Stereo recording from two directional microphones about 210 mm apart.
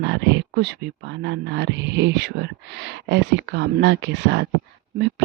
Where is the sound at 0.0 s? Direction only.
60° right (ahead or behind).